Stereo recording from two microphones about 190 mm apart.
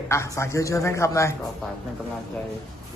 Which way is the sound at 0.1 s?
15° left (ahead or behind).